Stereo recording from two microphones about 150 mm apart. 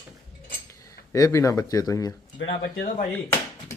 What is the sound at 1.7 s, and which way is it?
Speech, 25° left (ahead or behind).